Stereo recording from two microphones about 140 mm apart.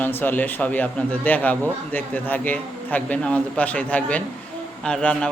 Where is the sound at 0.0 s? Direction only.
15° left (ahead or behind).